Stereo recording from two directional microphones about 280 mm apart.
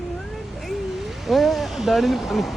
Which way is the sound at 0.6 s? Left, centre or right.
Centre.